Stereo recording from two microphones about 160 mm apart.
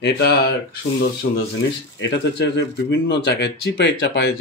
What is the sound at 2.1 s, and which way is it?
Speech, 90° left.